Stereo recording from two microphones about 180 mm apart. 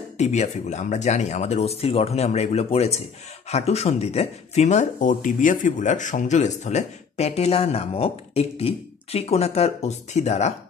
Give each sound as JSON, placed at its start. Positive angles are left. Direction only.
{"t": 0.2, "sound": "speech", "side_deg": 40}